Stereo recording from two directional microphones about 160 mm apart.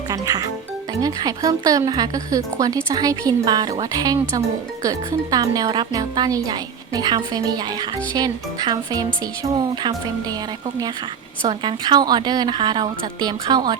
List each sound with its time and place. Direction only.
0.1 s speech: 20° right (ahead or behind)
11.4 s speech: 30° right (ahead or behind)